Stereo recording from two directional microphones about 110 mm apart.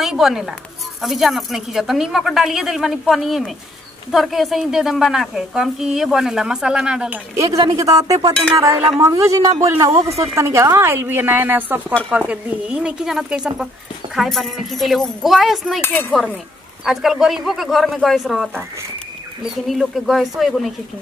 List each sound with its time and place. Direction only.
0.0 s a woman's voice: centre (ahead or behind)
7.3 s a woman's voice: 30° right (ahead or behind); by 15.8 s centre (ahead or behind)
15.8 s cutlery: 15° left (ahead or behind)
16.8 s a woman's voice: centre (ahead or behind)
18.5 s a woman's voice: 20° right (ahead or behind)
19.5 s a woman's voice: centre (ahead or behind)